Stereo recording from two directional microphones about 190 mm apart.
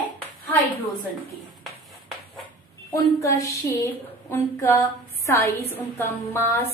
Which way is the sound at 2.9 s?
15° left (ahead or behind).